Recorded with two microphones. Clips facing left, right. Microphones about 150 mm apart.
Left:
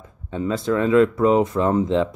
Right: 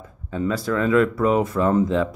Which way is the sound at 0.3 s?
25° left (ahead or behind).